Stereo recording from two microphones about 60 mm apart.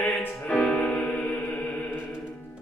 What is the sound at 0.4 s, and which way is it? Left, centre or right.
Music, left.